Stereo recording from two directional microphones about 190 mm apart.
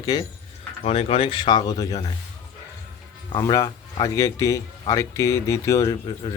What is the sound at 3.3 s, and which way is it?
Speech, 20° left (ahead or behind).